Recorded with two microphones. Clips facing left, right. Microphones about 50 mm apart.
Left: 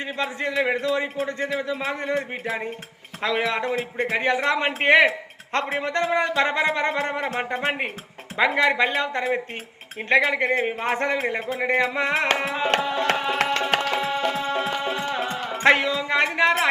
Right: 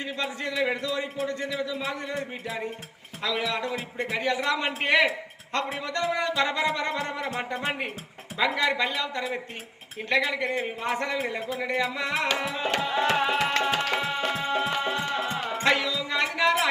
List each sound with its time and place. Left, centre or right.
0.0 s a man's voice: left
13.1 s music: centre
15.6 s music: left